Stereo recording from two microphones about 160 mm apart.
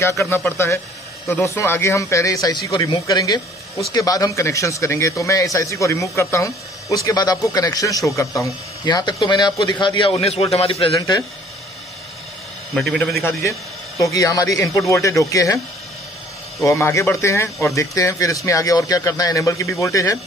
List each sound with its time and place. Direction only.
0.0 s a man's voice: 15° left (ahead or behind); by 10.9 s 35° left (ahead or behind)
11.0 s speech: 20° left (ahead or behind)
12.7 s a man's voice: 5° left (ahead or behind)
13.2 s a man's voice: 15° left (ahead or behind)
16.6 s speech: 20° left (ahead or behind)